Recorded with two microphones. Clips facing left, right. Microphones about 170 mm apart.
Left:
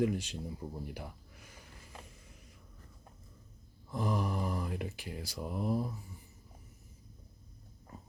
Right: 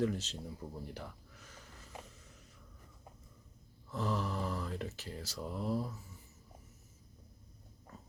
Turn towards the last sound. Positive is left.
turn(degrees=15)  # may be behind; listen again after turning